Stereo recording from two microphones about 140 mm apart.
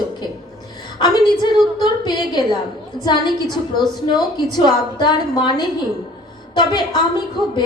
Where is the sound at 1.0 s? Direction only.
30° left (ahead or behind).